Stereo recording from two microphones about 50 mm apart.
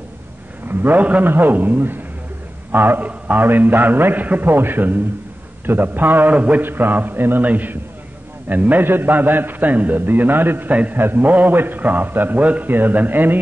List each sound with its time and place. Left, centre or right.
0.7 s a man's voice: right
1.2 s a man's voice: right
3.1 s a man's voice: right
3.4 s a man's voice: right
6.3 s a man's voice: right
6.6 s a man's voice: right
10.7 s a man's voice: right
11.0 s a man's voice: right
12.6 s a man's voice: right